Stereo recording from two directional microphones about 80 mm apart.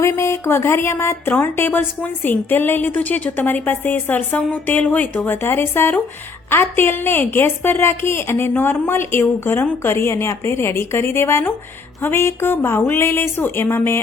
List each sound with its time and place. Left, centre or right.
0.0 s a woman's voice: left